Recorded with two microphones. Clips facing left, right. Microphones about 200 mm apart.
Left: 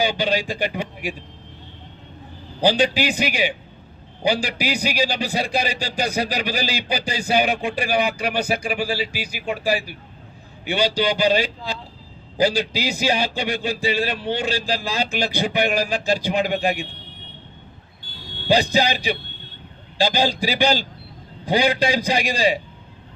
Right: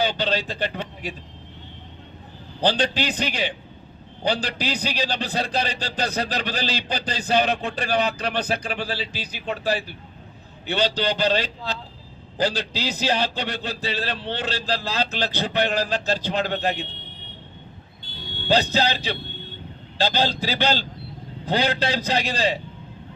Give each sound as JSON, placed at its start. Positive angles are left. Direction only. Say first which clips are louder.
{"t": 0.0, "sound": "a man's voice", "louder": "left 2 dB", "side_deg": 10}
{"t": 2.6, "sound": "a man's voice", "louder": "left 4 dB", "side_deg": 10}
{"t": 18.1, "sound": "fire alarm", "louder": "right 1 dB", "side_deg": -25}
{"t": 18.4, "sound": "a man's voice", "louder": "left 2 dB", "side_deg": 10}